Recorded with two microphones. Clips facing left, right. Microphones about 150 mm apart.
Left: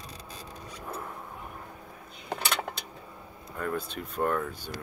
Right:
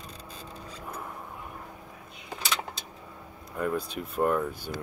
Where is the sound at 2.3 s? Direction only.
60° left (ahead or behind).